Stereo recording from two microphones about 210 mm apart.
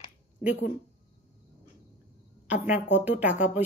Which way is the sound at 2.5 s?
5° right (ahead or behind).